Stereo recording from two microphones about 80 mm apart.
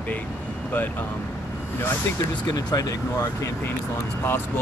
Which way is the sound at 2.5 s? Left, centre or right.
Left.